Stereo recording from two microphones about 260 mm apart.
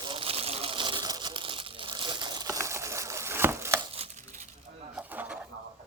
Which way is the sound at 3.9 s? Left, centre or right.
Right.